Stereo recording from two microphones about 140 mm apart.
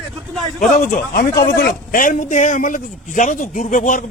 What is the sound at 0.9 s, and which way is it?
A man's voice, 80° left.